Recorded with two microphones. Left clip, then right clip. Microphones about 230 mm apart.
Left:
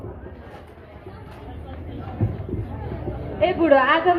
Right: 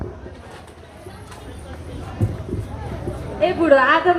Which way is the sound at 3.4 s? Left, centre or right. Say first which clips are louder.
Right 2 dB; right.